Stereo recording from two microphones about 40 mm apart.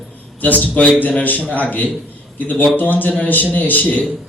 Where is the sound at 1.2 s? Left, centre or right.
Left.